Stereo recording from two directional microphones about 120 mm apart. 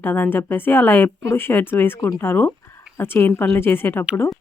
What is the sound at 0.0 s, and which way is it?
Speech, 15° left (ahead or behind).